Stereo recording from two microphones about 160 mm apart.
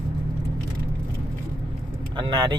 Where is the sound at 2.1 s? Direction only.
30° right (ahead or behind).